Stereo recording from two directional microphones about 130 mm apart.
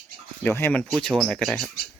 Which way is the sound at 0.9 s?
Centre (ahead or behind).